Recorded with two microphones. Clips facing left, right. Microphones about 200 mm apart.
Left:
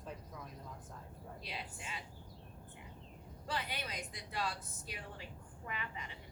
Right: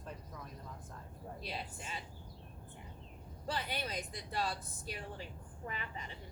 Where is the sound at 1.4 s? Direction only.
35° right (ahead or behind).